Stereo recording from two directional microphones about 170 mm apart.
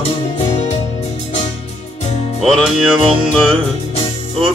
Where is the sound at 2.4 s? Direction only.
Centre (ahead or behind).